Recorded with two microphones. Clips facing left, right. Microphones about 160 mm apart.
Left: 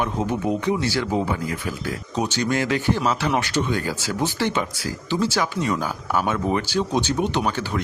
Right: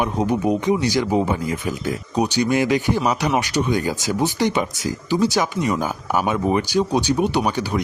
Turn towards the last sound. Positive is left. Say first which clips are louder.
# right 3 dB
turn(degrees=-15)  # may be behind; listen again after turning